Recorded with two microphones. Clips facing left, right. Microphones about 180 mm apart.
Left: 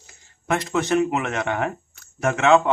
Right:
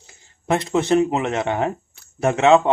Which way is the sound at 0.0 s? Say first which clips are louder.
Right 4 dB; 30° right (ahead or behind).